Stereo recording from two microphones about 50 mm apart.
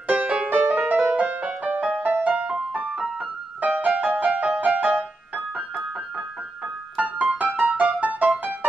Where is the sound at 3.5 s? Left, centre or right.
Right.